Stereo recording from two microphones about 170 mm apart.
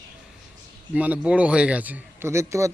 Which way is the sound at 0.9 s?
10° right (ahead or behind).